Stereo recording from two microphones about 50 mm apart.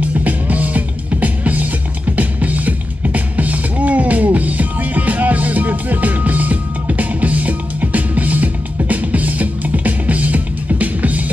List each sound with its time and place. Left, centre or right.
0.0 s music: right